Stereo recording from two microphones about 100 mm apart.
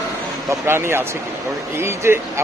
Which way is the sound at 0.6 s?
25° right (ahead or behind).